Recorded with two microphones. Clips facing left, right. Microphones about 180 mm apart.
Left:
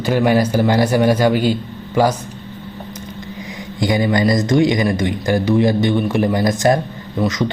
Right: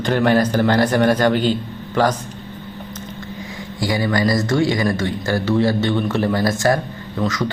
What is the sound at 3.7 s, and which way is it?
Speech, 20° left (ahead or behind).